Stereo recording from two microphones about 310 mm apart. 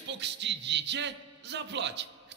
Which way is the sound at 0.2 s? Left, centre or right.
Right.